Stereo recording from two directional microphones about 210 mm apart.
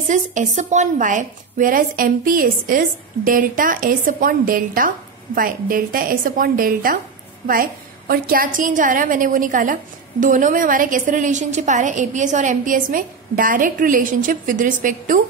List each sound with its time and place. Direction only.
0.1 s a woman's voice: 35° right (ahead or behind)